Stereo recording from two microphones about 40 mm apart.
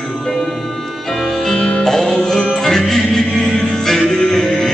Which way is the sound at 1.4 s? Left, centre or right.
Left.